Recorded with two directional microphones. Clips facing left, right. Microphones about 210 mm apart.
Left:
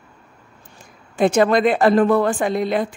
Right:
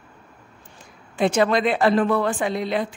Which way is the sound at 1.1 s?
50° left (ahead or behind).